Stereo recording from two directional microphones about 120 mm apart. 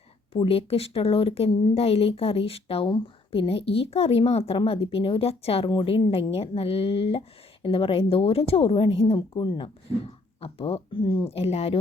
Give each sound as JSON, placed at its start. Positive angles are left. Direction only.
{"t": 0.3, "sound": "speech", "side_deg": 50}
{"t": 1.5, "sound": "a woman's voice", "side_deg": 40}
{"t": 1.7, "sound": "a woman's voice", "side_deg": 55}
{"t": 5.6, "sound": "a woman's voice", "side_deg": 40}
{"t": 5.9, "sound": "a woman's voice", "side_deg": 55}